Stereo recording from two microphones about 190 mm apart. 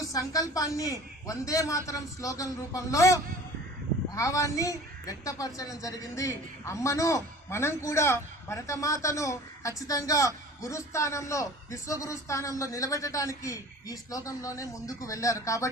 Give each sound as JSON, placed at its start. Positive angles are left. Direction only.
{"t": 0.0, "sound": "a man's voice", "side_deg": 15}